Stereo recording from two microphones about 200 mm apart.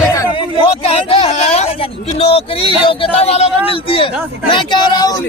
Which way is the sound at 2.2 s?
30° left (ahead or behind).